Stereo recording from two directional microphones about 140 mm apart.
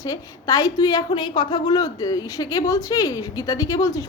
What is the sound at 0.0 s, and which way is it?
A woman's voice, 25° left (ahead or behind).